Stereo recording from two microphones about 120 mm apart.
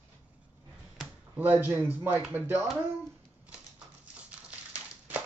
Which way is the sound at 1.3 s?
15° right (ahead or behind).